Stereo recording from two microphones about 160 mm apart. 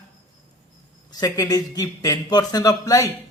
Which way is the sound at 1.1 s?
20° left (ahead or behind).